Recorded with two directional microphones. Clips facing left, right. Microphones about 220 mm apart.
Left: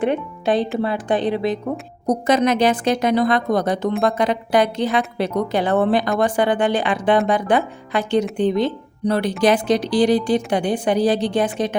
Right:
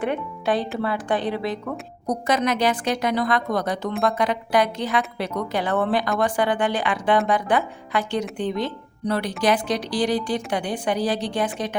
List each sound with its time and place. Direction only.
0.0 s a woman's voice: 20° left (ahead or behind)